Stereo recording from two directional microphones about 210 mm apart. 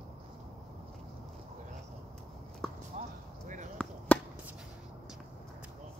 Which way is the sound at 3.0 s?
35° right (ahead or behind).